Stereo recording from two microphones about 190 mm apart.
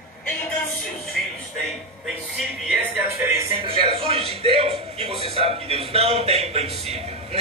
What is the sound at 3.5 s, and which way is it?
A man's voice, 25° right (ahead or behind).